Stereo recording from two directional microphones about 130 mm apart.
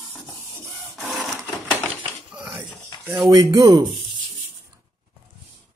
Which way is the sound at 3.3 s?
30° right (ahead or behind).